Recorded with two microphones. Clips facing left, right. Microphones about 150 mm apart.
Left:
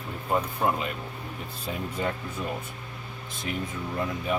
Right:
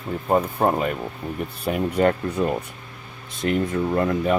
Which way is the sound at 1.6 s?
65° right (ahead or behind).